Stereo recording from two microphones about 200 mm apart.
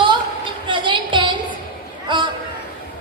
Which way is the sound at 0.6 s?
25° right (ahead or behind).